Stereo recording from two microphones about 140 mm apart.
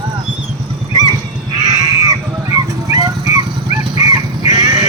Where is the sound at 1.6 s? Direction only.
25° right (ahead or behind).